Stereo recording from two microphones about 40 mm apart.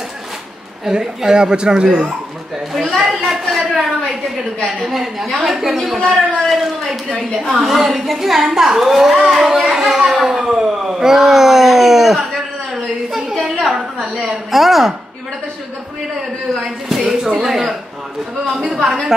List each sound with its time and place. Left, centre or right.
0.8 s speech: centre
1.9 s speech: right
2.7 s a woman's voice: centre
3.1 s a sound: centre
4.8 s a woman's voice: centre
9.8 s a sound: centre
14.5 s a woman's voice: centre
16.5 s a sound: centre
17.4 s a woman's voice: centre